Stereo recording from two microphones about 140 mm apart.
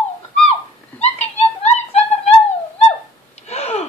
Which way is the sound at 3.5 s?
50° left (ahead or behind).